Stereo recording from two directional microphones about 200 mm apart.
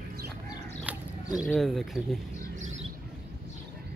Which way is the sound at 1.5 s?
Centre (ahead or behind).